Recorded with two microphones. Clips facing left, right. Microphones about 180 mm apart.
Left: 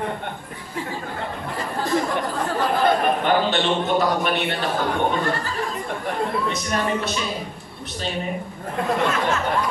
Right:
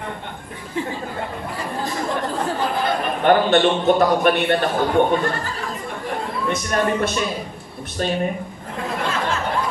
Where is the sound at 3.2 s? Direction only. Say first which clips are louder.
Right 5 dB; 55° right (ahead or behind).